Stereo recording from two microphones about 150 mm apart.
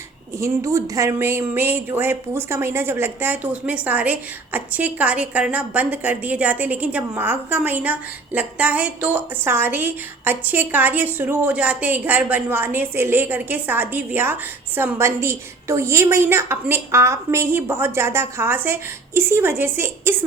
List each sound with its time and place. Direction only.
0.3 s speech: 20° right (ahead or behind)